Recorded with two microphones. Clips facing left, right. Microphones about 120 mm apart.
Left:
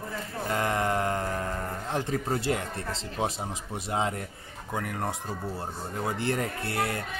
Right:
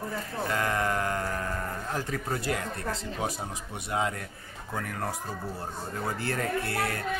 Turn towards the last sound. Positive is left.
turn(degrees=25)  # may be behind; listen again after turning